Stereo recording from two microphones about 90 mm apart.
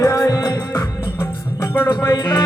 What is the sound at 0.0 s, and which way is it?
Music, 35° left (ahead or behind).